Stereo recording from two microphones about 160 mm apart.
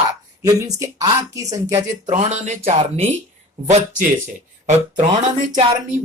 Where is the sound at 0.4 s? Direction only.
20° right (ahead or behind).